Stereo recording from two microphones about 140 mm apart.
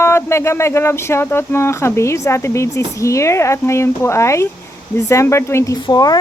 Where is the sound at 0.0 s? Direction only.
20° left (ahead or behind).